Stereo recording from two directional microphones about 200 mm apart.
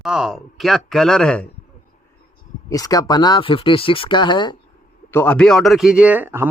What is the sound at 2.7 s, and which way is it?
Speech, 20° left (ahead or behind).